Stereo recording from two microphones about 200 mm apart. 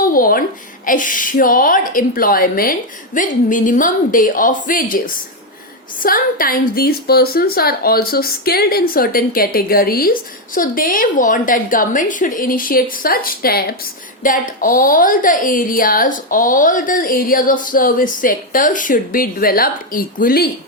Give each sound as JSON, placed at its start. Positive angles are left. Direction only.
{"t": 0.1, "sound": "a woman's voice", "side_deg": 45}